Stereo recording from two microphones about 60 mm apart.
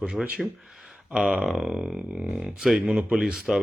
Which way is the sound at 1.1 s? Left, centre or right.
Centre.